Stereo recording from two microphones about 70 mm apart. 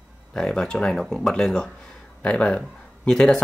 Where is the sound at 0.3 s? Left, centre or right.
Centre.